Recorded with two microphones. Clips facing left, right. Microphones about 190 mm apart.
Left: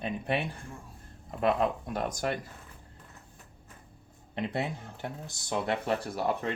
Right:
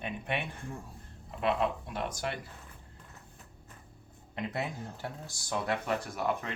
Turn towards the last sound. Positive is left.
turn(degrees=30)  # may be behind; listen again after turning